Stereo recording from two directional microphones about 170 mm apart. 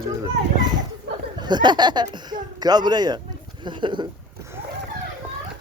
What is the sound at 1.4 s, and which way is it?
Speech, 25° right (ahead or behind).